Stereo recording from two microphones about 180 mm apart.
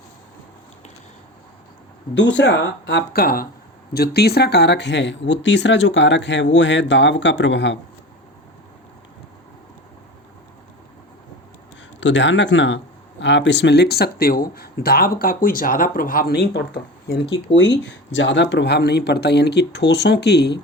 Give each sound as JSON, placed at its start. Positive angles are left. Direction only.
{"t": 2.1, "sound": "a man's voice", "side_deg": 80}
{"t": 11.9, "sound": "speech", "side_deg": 90}
{"t": 17.5, "sound": "a man's voice", "side_deg": 85}